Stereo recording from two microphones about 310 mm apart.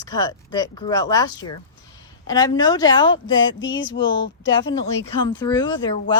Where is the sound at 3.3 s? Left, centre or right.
Left.